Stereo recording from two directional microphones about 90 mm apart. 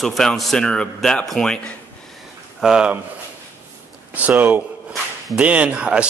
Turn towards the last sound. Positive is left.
turn(degrees=-10)  # may be behind; listen again after turning